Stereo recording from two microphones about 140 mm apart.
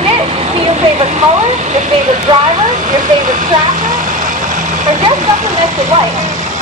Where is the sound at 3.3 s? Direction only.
65° right (ahead or behind).